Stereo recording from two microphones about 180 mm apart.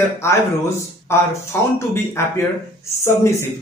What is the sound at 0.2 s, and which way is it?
Speech, 15° left (ahead or behind).